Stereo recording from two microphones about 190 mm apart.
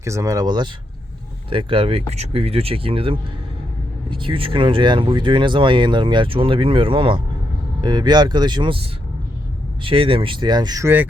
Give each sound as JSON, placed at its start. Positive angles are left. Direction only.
{"t": 0.0, "sound": "speech", "side_deg": -15}